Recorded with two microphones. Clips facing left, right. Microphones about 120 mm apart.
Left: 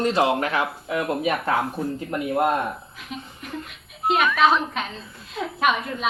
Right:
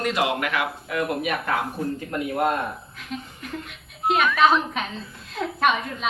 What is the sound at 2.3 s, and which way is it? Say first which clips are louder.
Speech: left 2 dB; 10° left (ahead or behind).